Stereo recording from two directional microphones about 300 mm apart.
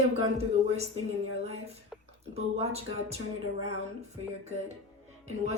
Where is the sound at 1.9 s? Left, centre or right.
Centre.